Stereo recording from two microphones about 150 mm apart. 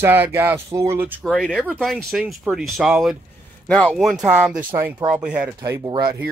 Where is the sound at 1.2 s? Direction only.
Centre (ahead or behind).